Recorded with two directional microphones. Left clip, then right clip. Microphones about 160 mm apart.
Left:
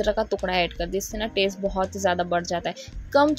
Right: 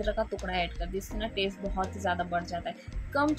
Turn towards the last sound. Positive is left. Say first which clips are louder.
# left 10 dB
turn(degrees=45)  # may be behind; listen again after turning